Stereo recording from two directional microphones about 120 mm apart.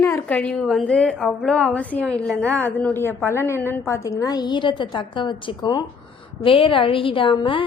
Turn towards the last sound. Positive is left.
turn(degrees=45)  # may be behind; listen again after turning